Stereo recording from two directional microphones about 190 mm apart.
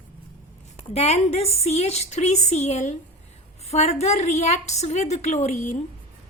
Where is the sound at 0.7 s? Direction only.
35° left (ahead or behind).